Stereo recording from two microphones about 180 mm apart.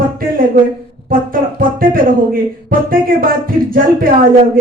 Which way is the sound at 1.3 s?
50° right (ahead or behind).